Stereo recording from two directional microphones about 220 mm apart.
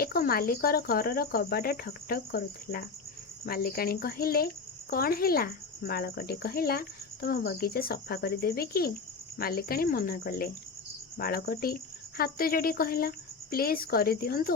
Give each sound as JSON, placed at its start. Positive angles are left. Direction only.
{"t": 0.0, "sound": "speech", "side_deg": 45}